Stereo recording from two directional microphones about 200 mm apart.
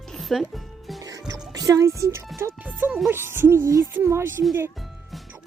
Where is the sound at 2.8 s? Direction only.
5° right (ahead or behind).